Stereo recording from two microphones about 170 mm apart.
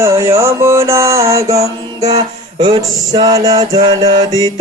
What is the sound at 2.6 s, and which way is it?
Music, 25° right (ahead or behind).